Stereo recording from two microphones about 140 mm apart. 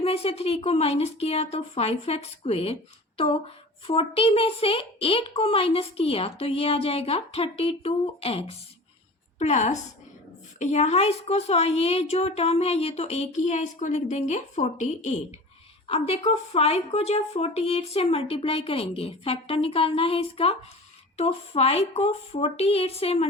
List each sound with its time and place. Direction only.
0.0 s a woman's voice: 45° left (ahead or behind)
3.8 s a woman's voice: 45° left (ahead or behind)
9.4 s a woman's voice: 55° left (ahead or behind)
15.9 s a woman's voice: 45° left (ahead or behind)